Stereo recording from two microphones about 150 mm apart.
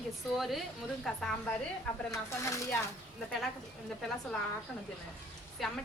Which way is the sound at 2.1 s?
20° left (ahead or behind).